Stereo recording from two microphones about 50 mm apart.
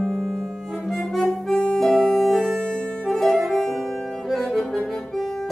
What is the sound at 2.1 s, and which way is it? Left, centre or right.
Music, centre.